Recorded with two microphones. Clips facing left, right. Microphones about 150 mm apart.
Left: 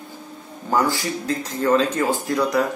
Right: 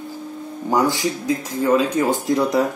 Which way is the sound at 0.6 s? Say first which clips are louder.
Right 2 dB; 15° right (ahead or behind).